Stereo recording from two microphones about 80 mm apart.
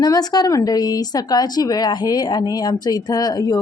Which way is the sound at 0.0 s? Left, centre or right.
Left.